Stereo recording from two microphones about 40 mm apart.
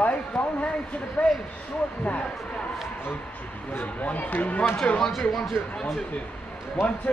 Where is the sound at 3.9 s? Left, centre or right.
Left.